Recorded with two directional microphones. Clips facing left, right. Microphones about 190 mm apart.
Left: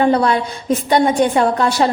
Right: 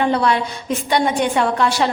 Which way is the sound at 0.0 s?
45° left (ahead or behind).